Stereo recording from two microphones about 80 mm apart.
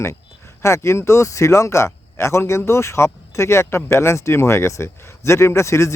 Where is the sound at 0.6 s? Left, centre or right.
Left.